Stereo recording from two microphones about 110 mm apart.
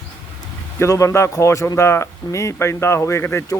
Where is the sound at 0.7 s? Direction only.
25° left (ahead or behind).